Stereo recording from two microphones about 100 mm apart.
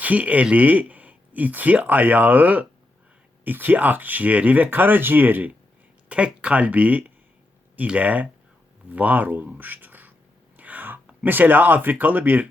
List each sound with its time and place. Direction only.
0.0 s speech: 15° right (ahead or behind)